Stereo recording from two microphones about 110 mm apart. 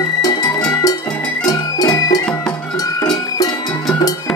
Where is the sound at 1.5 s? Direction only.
35° left (ahead or behind).